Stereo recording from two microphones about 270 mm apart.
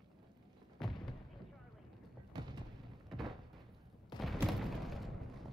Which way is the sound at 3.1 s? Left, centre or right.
Centre.